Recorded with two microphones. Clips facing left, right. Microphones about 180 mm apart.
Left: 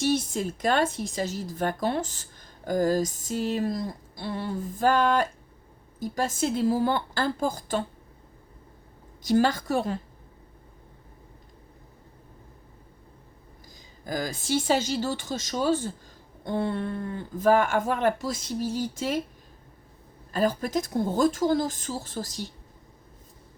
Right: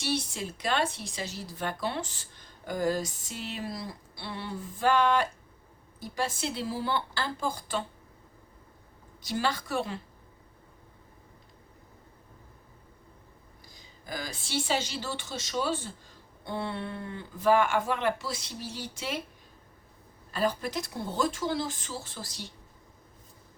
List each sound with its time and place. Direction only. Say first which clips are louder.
0.0 s a woman's voice: left 7 dB; 45° left (ahead or behind)
9.2 s a woman's voice: left 8 dB; 45° left (ahead or behind)
13.7 s a woman's voice: left 7 dB; 45° left (ahead or behind)
20.3 s a woman's voice: left 5 dB; 45° left (ahead or behind)